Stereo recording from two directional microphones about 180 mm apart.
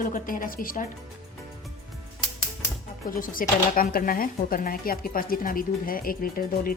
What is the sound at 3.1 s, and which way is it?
Speech, 50° left (ahead or behind).